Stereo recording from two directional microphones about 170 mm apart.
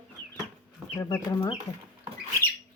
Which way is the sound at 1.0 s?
20° left (ahead or behind).